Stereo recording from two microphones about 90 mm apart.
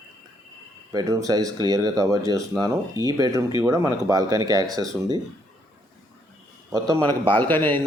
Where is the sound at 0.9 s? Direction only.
40° right (ahead or behind).